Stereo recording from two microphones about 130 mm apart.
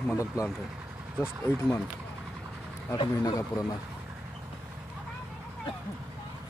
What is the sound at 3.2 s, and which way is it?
Speech, 25° left (ahead or behind).